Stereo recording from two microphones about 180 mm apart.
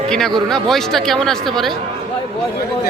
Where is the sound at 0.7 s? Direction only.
Centre (ahead or behind).